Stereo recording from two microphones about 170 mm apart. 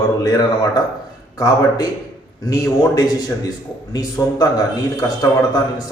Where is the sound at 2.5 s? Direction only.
20° left (ahead or behind).